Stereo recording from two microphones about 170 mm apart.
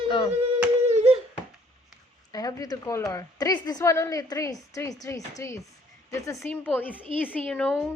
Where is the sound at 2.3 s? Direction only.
20° left (ahead or behind).